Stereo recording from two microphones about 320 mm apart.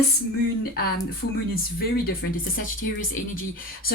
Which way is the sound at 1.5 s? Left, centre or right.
Left.